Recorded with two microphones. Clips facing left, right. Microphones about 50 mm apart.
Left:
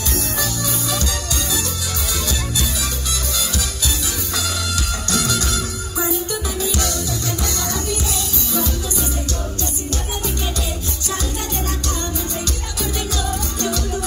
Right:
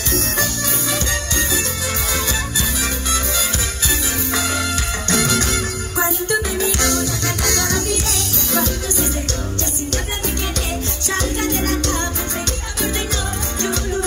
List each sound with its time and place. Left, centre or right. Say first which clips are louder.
0.1 s music: right 4 dB; right
5.0 s music: right 4 dB; right
7.4 s music: right 4 dB; right
11.1 s music: right 5 dB; right